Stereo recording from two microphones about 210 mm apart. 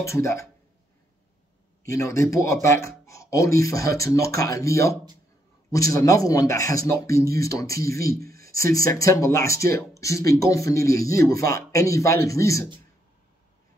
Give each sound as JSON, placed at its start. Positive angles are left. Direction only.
{"t": 0.0, "sound": "speech", "side_deg": 15}
{"t": 1.9, "sound": "speech", "side_deg": 15}
{"t": 8.1, "sound": "speech", "side_deg": -45}
{"t": 8.4, "sound": "speech", "side_deg": 15}